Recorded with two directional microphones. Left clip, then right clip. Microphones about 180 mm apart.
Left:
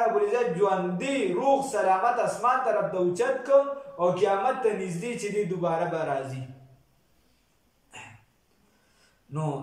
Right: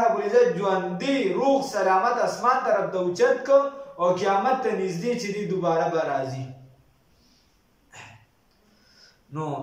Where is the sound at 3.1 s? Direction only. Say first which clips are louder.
Right 4 dB; 15° left (ahead or behind).